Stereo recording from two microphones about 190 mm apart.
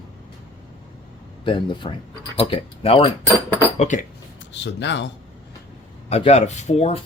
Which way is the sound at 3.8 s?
40° left (ahead or behind).